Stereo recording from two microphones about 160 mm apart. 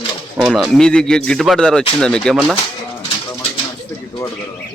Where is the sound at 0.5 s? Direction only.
5° left (ahead or behind).